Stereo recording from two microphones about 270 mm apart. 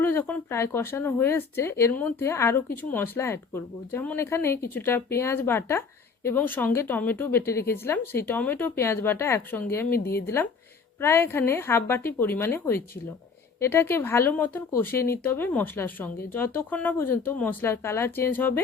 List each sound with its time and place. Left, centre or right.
0.0 s speech: centre
8.0 s speech: left
8.3 s speech: centre
10.0 s speech: left
10.2 s speech: centre